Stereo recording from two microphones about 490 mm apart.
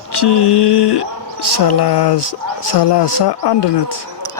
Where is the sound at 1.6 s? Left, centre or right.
Left.